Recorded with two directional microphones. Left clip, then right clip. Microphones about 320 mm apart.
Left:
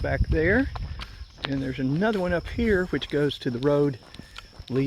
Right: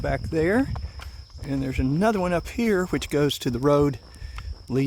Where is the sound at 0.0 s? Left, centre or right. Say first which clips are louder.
Right 1 dB; centre.